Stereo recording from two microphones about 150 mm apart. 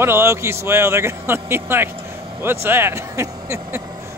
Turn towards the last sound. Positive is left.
turn(degrees=-20)  # may be behind; listen again after turning